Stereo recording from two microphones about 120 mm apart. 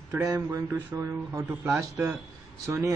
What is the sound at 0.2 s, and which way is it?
Speech, 25° right (ahead or behind).